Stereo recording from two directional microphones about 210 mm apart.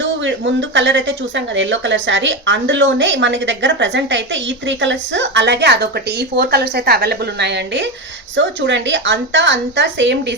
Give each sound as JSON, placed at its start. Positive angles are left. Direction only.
{"t": 0.0, "sound": "a woman's voice", "side_deg": -60}